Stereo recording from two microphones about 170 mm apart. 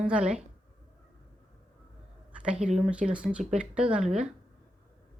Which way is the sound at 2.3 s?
5° right (ahead or behind).